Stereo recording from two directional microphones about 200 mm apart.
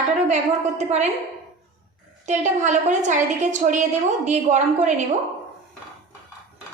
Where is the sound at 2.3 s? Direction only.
35° right (ahead or behind).